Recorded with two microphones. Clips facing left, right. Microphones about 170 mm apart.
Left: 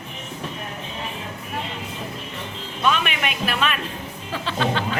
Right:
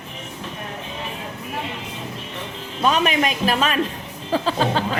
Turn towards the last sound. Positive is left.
turn(degrees=-40)  # may be behind; listen again after turning